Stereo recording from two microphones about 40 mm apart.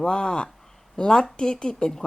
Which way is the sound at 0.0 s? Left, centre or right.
Left.